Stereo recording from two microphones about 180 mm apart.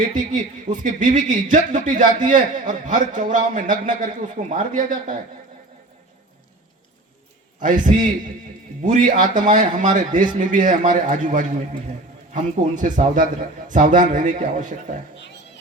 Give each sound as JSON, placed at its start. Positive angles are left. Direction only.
{"t": 0.0, "sound": "speech", "side_deg": -45}
{"t": 7.6, "sound": "speech", "side_deg": -45}